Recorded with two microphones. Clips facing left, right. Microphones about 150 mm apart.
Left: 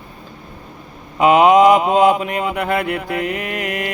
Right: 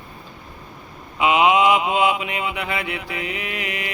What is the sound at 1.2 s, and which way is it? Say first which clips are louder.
Mantra: left 6 dB; 45° left (ahead or behind).